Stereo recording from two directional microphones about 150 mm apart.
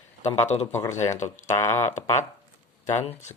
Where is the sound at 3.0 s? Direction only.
40° left (ahead or behind).